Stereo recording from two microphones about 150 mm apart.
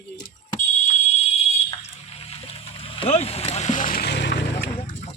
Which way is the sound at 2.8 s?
45° left (ahead or behind).